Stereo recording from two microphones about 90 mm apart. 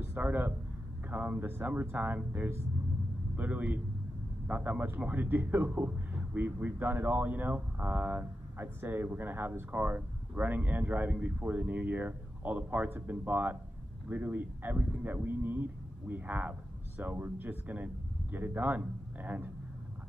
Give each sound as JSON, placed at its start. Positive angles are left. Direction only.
{"t": 0.0, "sound": "a man's voice", "side_deg": -20}